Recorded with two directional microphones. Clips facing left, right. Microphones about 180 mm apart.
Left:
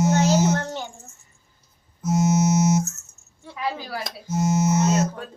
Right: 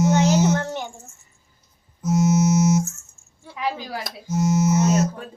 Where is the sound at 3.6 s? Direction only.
20° right (ahead or behind).